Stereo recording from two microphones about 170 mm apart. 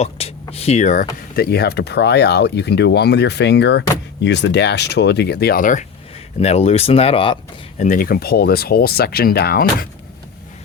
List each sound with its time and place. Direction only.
0.0 s speech: 35° left (ahead or behind)
1.4 s speech: 70° left (ahead or behind); by 5.8 s 55° left (ahead or behind)
6.4 s speech: 40° left (ahead or behind)
7.8 s speech: 50° left (ahead or behind); by 9.6 s 70° left (ahead or behind)